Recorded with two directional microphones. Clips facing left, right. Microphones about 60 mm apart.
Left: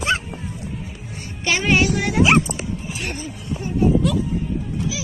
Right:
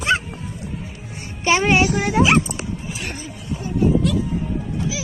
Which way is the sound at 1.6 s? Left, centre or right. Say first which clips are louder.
Right 1 dB; right.